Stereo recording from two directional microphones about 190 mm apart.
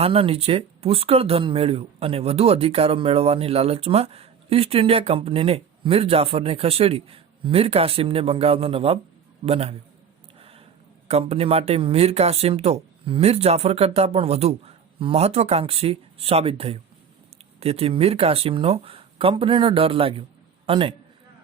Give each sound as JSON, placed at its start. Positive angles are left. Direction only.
{"t": 0.0, "sound": "speech", "side_deg": -30}
{"t": 10.3, "sound": "a sound", "side_deg": -30}
{"t": 11.1, "sound": "speech", "side_deg": -30}